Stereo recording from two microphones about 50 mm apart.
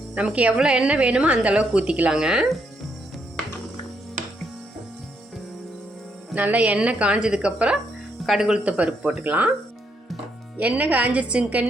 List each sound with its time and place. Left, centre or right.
0.3 s speech: right
6.3 s speech: right; by 8.6 s centre
8.6 s speech: right
9.2 s speech: right
10.6 s speech: right